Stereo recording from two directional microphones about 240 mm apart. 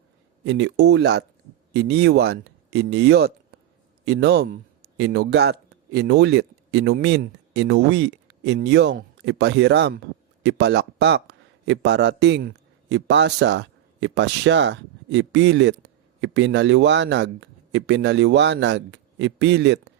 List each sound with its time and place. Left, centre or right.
0.4 s speech: right